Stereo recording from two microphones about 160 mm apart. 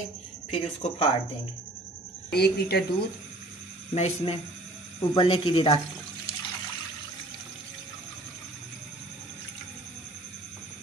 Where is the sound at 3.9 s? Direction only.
45° left (ahead or behind).